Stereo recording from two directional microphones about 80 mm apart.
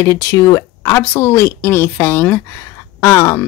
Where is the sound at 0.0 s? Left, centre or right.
Left.